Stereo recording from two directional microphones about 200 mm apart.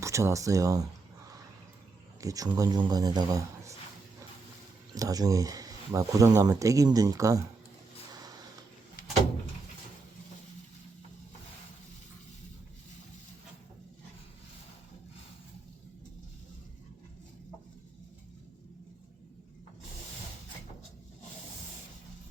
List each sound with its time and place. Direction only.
0.0 s speech: 15° right (ahead or behind)
2.2 s a man's voice: 15° right (ahead or behind)
4.9 s speech: 20° right (ahead or behind)